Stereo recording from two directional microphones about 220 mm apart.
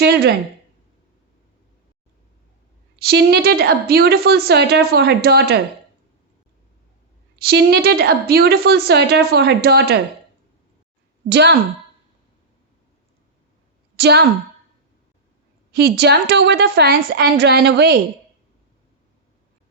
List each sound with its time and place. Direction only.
0.0 s speech: 50° right (ahead or behind)
3.0 s a woman's voice: 45° right (ahead or behind)
7.3 s a woman's voice: 45° right (ahead or behind)
11.3 s a woman's voice: 50° right (ahead or behind)
13.9 s a woman's voice: 50° right (ahead or behind)
16.0 s a woman's voice: 50° right (ahead or behind)